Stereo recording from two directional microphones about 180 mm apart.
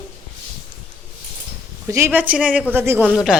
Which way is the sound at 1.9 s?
15° right (ahead or behind).